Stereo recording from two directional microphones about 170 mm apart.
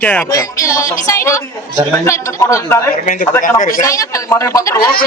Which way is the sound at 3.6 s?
50° left (ahead or behind).